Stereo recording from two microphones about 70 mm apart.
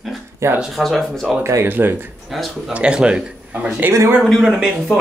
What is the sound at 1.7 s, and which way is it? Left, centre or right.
Speech, right.